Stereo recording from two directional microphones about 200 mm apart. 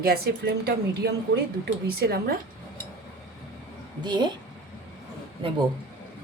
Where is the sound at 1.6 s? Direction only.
50° right (ahead or behind).